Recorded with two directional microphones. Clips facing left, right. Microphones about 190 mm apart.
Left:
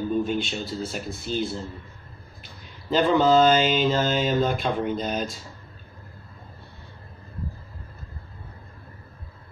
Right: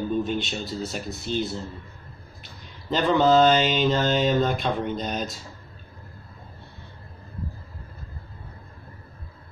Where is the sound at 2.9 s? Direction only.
5° left (ahead or behind).